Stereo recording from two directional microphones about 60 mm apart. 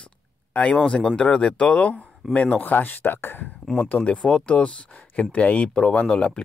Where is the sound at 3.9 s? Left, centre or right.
Left.